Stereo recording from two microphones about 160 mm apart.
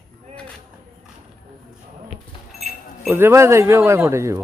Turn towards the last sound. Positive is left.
turn(degrees=-20)  # may be behind; listen again after turning